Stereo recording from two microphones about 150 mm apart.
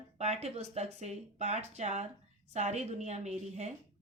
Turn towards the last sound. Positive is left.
turn(degrees=-45)  # may be behind; listen again after turning